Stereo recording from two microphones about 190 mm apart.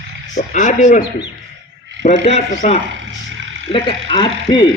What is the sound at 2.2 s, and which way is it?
Speech, 35° left (ahead or behind).